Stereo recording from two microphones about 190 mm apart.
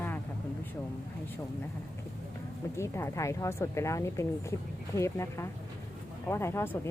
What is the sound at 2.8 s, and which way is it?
A woman's voice, 15° left (ahead or behind).